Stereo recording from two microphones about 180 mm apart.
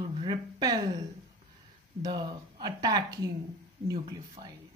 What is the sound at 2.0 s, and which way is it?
Speech, 25° right (ahead or behind).